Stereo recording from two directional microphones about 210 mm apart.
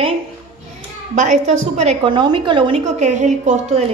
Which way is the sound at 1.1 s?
35° right (ahead or behind).